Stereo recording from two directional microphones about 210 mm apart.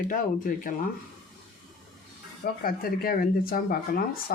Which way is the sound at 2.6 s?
45° left (ahead or behind).